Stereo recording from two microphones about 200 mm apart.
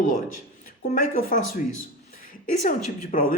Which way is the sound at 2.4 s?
40° left (ahead or behind).